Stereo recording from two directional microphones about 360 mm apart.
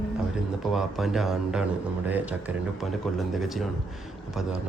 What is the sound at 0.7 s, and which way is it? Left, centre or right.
Speech, centre.